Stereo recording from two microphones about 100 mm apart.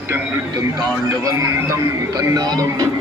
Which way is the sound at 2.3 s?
35° right (ahead or behind).